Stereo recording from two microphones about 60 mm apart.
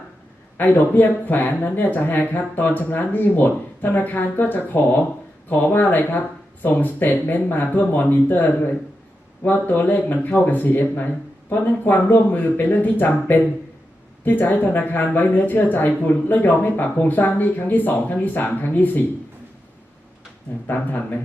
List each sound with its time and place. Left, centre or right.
0.5 s speech: left
20.7 s speech: left